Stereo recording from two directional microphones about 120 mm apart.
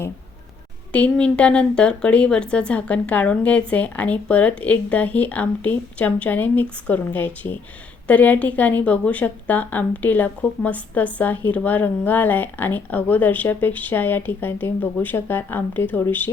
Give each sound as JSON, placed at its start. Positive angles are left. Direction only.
{"t": 0.9, "sound": "a woman's voice", "side_deg": 10}